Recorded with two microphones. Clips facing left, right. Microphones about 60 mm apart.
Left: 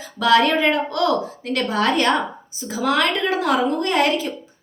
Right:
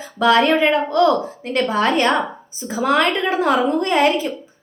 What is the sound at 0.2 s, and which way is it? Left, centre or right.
A woman's voice, right.